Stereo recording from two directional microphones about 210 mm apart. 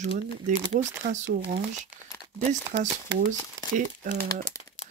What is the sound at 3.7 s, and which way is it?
Speech, 40° right (ahead or behind).